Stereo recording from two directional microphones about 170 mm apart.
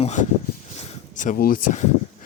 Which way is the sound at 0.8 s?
45° left (ahead or behind).